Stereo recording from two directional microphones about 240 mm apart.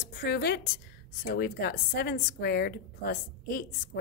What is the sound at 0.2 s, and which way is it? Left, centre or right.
A woman's voice, left.